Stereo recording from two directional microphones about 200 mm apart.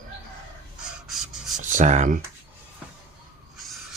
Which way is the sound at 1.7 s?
40° right (ahead or behind).